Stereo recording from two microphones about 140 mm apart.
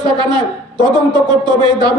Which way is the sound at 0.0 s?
30° right (ahead or behind).